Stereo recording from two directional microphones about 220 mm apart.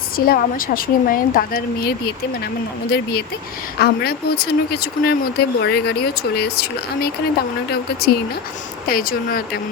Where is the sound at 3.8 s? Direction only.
45° left (ahead or behind).